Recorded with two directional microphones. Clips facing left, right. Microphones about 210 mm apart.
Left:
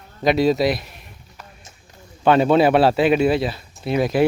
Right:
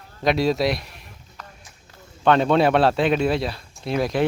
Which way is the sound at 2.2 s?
5° left (ahead or behind).